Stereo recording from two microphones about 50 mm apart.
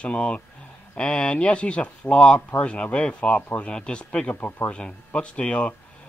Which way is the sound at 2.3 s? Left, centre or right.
Left.